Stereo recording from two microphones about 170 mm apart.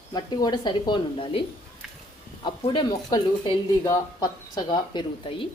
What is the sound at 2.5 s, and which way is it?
Speech, 30° left (ahead or behind).